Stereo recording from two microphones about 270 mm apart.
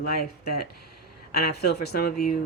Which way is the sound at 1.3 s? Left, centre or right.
Left.